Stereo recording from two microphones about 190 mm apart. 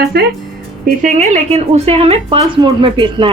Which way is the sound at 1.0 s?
40° right (ahead or behind).